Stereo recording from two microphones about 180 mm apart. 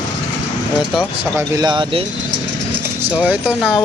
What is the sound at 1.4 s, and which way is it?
Speech, 20° right (ahead or behind).